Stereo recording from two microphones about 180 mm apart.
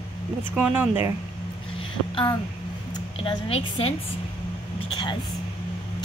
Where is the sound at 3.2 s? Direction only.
30° left (ahead or behind).